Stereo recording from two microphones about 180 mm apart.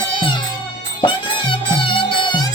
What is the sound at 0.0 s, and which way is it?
Music, 25° left (ahead or behind).